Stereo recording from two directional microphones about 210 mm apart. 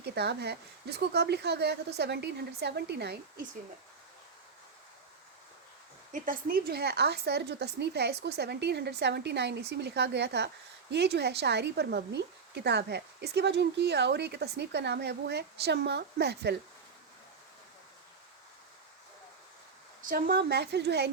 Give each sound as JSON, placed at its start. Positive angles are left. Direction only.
{"t": 0.0, "sound": "speech", "side_deg": -50}
{"t": 6.1, "sound": "speech", "side_deg": -40}
{"t": 20.0, "sound": "speech", "side_deg": -40}